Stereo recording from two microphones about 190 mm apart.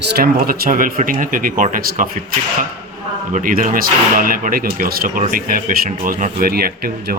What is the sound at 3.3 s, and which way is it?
Speech, 45° right (ahead or behind).